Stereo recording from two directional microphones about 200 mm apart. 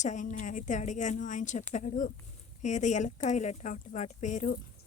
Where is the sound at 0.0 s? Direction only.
35° left (ahead or behind).